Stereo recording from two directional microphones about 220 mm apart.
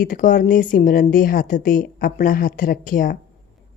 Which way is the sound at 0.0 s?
35° left (ahead or behind).